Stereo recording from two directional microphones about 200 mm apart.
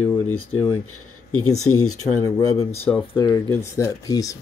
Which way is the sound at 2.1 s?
15° left (ahead or behind).